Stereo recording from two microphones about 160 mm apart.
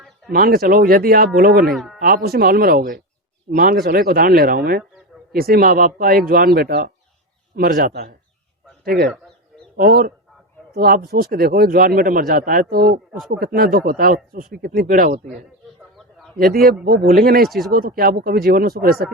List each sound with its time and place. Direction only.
0.3 s speech: 70° right (ahead or behind)
1.7 s speech: centre (ahead or behind)
2.0 s a man's voice: 65° right (ahead or behind)
16.0 s chicken: centre (ahead or behind)
16.4 s speech: 65° right (ahead or behind)